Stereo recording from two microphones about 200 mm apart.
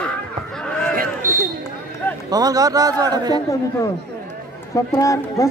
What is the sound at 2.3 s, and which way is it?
A man's voice, 20° right (ahead or behind).